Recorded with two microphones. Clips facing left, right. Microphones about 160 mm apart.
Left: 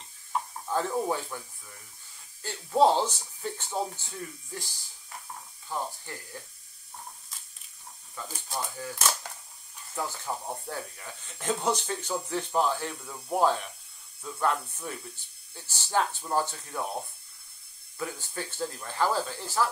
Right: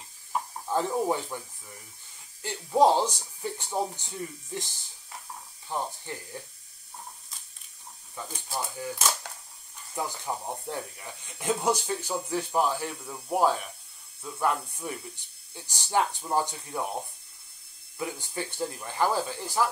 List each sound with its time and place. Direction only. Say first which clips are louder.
0.3 s electric shaver: right 1 dB; 15° right (ahead or behind)
2.4 s speech: right 1 dB; 15° right (ahead or behind)
6.1 s speech: right 4 dB; 20° right (ahead or behind)
8.5 s speech: right 2 dB; 10° right (ahead or behind)